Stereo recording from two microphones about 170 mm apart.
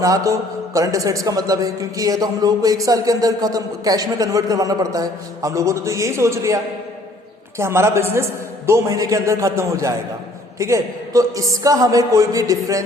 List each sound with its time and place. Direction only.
0.0 s a man's voice: 20° right (ahead or behind)
7.6 s a man's voice: 15° right (ahead or behind)